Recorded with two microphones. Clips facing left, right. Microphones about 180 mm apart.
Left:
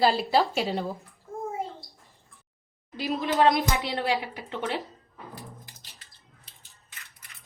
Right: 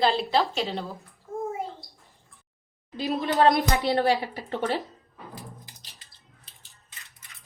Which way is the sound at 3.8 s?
45° right (ahead or behind).